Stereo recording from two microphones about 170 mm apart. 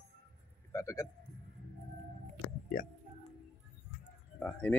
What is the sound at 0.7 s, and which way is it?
Speech, 15° left (ahead or behind).